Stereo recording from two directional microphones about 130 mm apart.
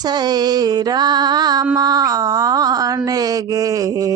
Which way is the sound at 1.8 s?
30° right (ahead or behind).